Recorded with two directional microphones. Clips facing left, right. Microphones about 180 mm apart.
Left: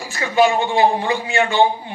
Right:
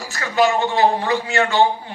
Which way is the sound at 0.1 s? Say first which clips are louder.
Left 2 dB; 15° left (ahead or behind).